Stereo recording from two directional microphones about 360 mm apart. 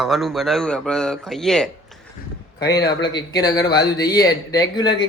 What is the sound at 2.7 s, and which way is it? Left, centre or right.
A man's voice, centre.